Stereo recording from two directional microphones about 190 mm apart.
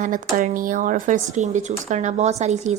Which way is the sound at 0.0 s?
45° right (ahead or behind).